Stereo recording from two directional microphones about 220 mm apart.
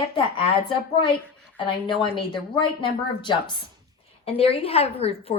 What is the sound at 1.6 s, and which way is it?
A woman's voice, 20° left (ahead or behind).